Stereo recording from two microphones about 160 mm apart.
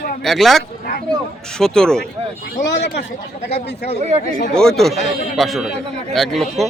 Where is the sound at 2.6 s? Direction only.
90° left.